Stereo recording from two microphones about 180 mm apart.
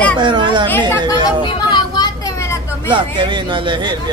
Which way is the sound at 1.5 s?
25° left (ahead or behind).